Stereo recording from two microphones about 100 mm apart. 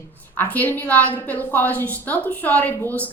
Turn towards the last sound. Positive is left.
turn(degrees=15)  # may be behind; listen again after turning